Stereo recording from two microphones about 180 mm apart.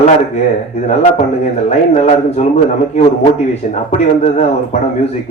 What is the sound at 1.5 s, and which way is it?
Speech, 40° left (ahead or behind).